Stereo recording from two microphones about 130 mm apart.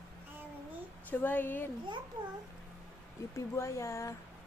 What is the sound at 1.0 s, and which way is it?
Speech, 15° left (ahead or behind).